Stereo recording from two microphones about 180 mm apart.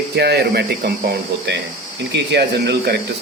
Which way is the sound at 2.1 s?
70° right (ahead or behind).